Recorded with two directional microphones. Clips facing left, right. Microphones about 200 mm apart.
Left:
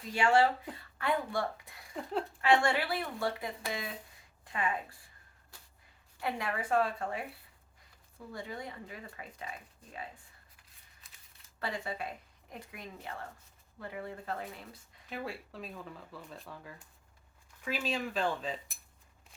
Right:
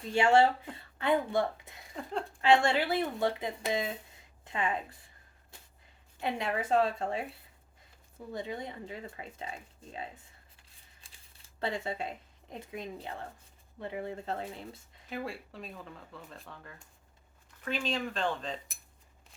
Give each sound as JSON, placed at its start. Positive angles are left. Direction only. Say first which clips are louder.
{"t": 0.1, "sound": "speech", "louder": "right 3 dB", "side_deg": -25}
{"t": 6.1, "sound": "speech", "louder": "right 3 dB", "side_deg": -20}
{"t": 8.3, "sound": "speech", "louder": "right 4 dB", "side_deg": -20}
{"t": 11.0, "sound": "a sound", "louder": "right 2 dB", "side_deg": -30}
{"t": 13.7, "sound": "speech", "louder": "right 4 dB", "side_deg": -25}
{"t": 15.1, "sound": "speech", "louder": "right 2 dB", "side_deg": 0}